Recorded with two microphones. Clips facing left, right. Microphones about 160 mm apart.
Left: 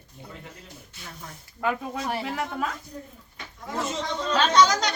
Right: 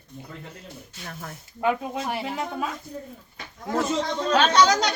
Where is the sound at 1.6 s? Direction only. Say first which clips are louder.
Right 3 dB; 20° right (ahead or behind).